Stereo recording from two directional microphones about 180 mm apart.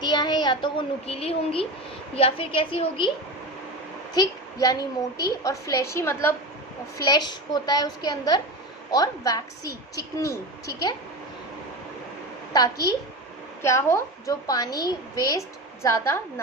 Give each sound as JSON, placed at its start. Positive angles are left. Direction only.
{"t": 0.0, "sound": "a child's voice", "side_deg": 25}
{"t": 4.1, "sound": "a woman's voice", "side_deg": 20}
{"t": 13.6, "sound": "a woman's voice", "side_deg": 15}